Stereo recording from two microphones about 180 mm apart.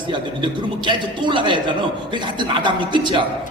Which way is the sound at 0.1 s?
25° right (ahead or behind).